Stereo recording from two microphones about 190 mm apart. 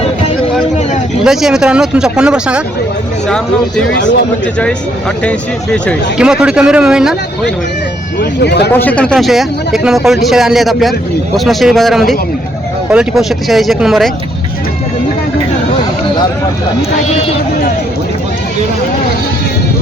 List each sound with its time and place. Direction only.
1.2 s speech: 5° right (ahead or behind)
5.7 s speech: 5° left (ahead or behind)
6.1 s speech: 5° right (ahead or behind)
8.2 s speech: 60° left (ahead or behind)
8.7 s speech: 10° left (ahead or behind)